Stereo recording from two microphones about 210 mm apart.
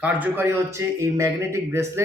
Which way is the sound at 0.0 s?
10° right (ahead or behind).